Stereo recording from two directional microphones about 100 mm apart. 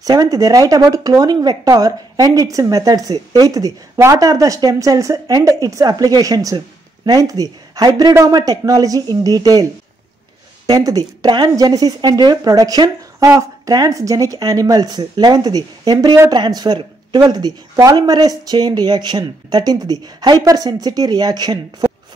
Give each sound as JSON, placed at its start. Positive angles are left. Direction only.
{"t": 0.0, "sound": "speech", "side_deg": -35}
{"t": 10.7, "sound": "speech", "side_deg": -40}